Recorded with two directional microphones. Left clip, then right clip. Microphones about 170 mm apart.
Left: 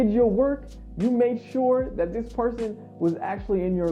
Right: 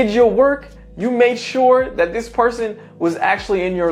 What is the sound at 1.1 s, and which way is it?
Speech, 10° right (ahead or behind).